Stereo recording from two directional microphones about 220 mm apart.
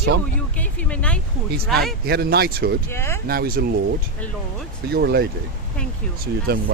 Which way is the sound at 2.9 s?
10° left (ahead or behind).